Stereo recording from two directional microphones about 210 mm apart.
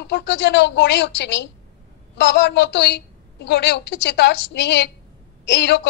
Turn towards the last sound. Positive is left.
turn(degrees=55)  # may be behind; listen again after turning